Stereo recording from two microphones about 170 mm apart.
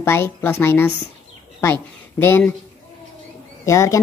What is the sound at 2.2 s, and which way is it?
Speech, 10° left (ahead or behind).